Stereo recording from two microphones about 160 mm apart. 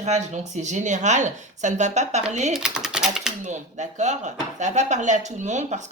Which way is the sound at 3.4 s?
50° right (ahead or behind).